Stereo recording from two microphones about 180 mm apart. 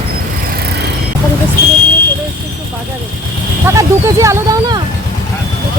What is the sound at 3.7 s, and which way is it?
Speech, 15° right (ahead or behind).